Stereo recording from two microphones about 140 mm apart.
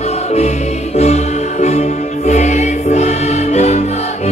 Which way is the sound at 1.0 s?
50° left (ahead or behind).